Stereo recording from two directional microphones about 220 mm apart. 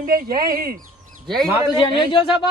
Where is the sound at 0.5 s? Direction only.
40° right (ahead or behind).